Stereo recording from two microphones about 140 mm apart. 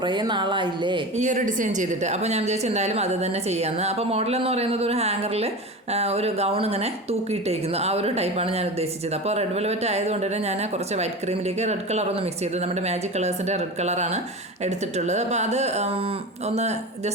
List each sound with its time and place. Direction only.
0.0 s speech: 30° right (ahead or behind)
1.1 s speech: 60° right (ahead or behind)